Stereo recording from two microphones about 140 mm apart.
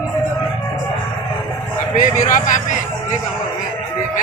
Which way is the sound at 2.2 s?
65° left (ahead or behind).